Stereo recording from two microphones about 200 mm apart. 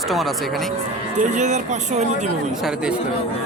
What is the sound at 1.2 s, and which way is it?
Speech, 40° right (ahead or behind).